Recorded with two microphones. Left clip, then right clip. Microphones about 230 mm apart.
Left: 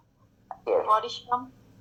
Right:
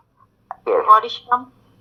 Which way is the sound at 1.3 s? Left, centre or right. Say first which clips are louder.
Right 9 dB; right.